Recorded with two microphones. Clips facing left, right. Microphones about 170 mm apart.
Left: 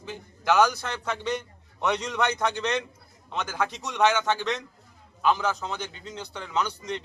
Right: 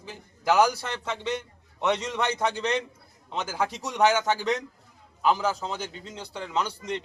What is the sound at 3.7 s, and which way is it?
Speech, 35° right (ahead or behind).